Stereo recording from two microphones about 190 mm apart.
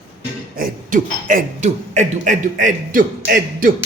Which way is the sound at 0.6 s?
45° right (ahead or behind).